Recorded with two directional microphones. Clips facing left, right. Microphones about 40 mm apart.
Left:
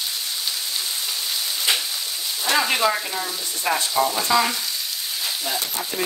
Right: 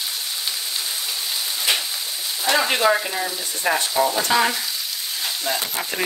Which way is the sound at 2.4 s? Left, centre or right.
Centre.